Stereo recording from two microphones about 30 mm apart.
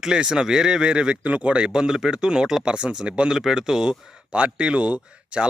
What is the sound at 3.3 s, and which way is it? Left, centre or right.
Speech, centre.